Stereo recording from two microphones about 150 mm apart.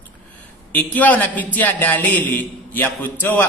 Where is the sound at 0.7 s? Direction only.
10° left (ahead or behind).